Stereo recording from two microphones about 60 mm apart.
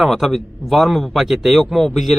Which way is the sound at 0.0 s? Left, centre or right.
Centre.